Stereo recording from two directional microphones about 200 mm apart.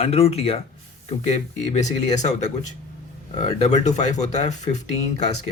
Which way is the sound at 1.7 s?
35° left (ahead or behind).